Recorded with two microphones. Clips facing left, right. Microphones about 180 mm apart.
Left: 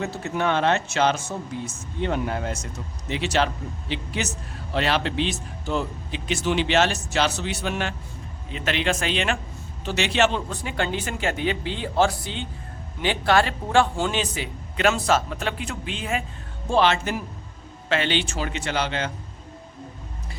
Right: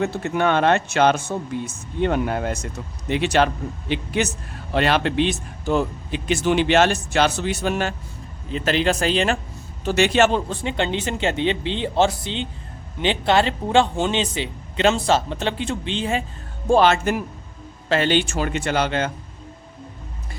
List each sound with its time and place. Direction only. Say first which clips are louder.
0.0 s a man's voice: right 4 dB; 60° right (ahead or behind); by 9.4 s 35° right (ahead or behind)
9.8 s a man's voice: right 5 dB; 50° right (ahead or behind)
10.5 s speech: right 3 dB; 25° right (ahead or behind)
16.6 s a man's voice: right 4 dB; 45° right (ahead or behind)